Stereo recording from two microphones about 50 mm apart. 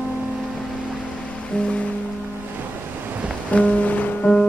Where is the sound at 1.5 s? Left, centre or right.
Centre.